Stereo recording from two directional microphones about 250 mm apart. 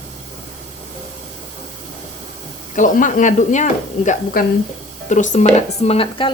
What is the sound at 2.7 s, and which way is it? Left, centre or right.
Speech, left.